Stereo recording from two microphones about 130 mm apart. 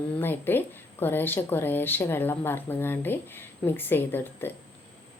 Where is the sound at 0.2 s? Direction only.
15° left (ahead or behind).